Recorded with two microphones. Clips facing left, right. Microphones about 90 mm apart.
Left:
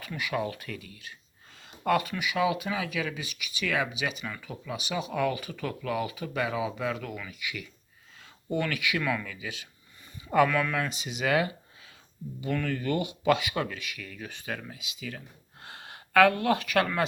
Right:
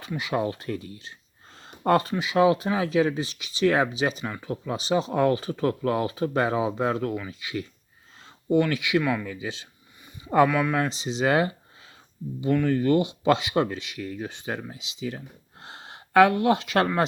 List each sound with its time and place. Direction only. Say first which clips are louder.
0.0 s speech: right 4 dB; 25° right (ahead or behind)
9.3 s speech: right 6 dB; 30° right (ahead or behind)
10.5 s speech: right 4 dB; 15° right (ahead or behind)
10.8 s speech: right 6 dB; 30° right (ahead or behind)